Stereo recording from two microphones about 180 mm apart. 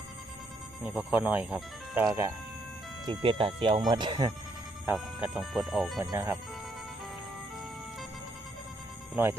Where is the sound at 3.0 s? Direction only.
30° right (ahead or behind).